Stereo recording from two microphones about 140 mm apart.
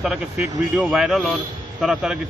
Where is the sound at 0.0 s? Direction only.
5° right (ahead or behind).